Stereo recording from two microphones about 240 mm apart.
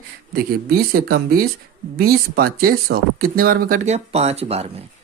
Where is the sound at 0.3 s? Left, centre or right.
Right.